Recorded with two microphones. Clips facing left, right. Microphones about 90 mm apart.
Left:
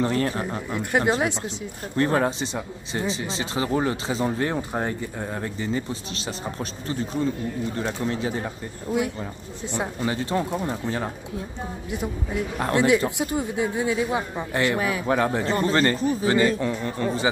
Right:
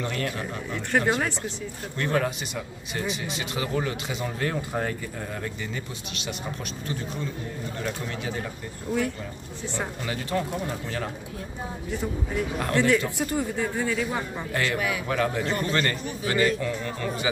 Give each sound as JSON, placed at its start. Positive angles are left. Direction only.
{"t": 0.0, "sound": "speech", "side_deg": 35}
{"t": 0.7, "sound": "speech", "side_deg": 15}
{"t": 2.0, "sound": "speech", "side_deg": 35}
{"t": 7.8, "sound": "speech", "side_deg": 30}
{"t": 12.7, "sound": "speech", "side_deg": 15}